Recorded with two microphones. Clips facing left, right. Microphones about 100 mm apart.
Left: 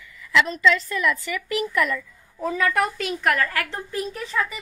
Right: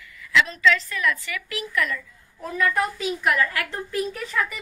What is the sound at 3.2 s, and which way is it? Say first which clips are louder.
Speech: left 1 dB; 50° left (ahead or behind).